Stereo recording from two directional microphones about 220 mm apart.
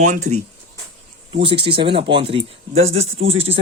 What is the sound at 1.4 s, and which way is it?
Speech, 25° right (ahead or behind).